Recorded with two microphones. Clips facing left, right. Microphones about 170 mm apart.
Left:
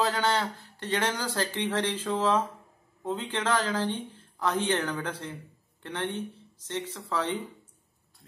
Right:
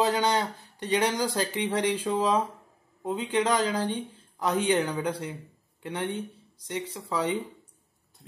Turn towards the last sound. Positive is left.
turn(degrees=-15)  # may be behind; listen again after turning